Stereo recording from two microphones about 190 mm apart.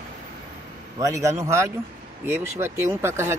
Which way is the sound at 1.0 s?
15° right (ahead or behind).